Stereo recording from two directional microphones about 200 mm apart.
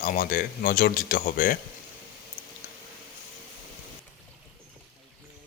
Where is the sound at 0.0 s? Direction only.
45° left (ahead or behind).